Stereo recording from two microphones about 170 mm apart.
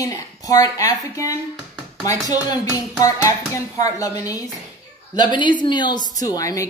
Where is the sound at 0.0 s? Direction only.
20° left (ahead or behind).